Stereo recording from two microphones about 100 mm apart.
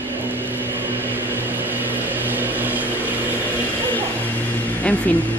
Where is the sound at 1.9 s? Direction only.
20° right (ahead or behind).